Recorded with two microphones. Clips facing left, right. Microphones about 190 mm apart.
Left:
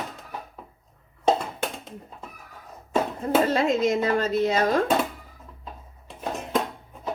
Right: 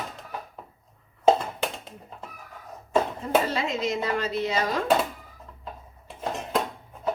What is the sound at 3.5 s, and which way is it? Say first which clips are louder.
Speech: left 6 dB; 50° left (ahead or behind).